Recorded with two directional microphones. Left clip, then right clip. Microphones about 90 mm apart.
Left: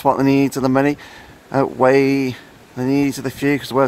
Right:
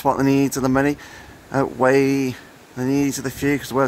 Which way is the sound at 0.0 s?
15° left (ahead or behind).